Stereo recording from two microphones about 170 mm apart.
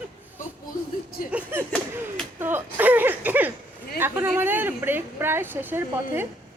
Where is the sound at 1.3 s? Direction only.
10° right (ahead or behind).